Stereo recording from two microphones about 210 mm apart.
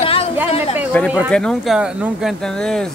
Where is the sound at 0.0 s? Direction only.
25° left (ahead or behind).